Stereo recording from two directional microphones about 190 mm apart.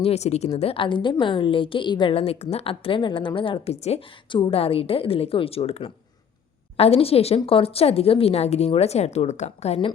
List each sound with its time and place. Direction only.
0.0 s a woman's voice: 35° left (ahead or behind)